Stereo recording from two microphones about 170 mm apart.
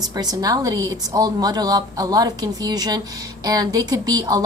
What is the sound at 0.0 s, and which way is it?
A woman's voice, 25° right (ahead or behind).